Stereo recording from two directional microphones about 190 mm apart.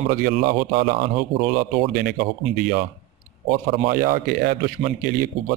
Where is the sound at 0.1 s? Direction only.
50° right (ahead or behind).